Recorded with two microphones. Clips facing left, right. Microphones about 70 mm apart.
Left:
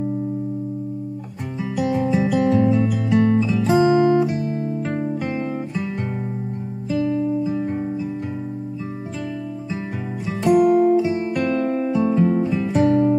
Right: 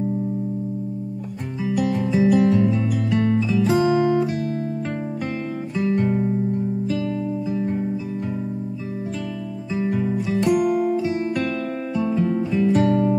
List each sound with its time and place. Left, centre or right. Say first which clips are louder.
1.6 s music: left 1 dB; centre
3.8 s music: left 3 dB; centre
5.8 s guitar: right 6 dB; centre
9.8 s music: right 6 dB; centre